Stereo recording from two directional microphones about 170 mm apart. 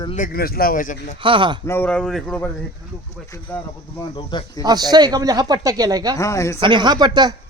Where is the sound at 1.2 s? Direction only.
30° right (ahead or behind).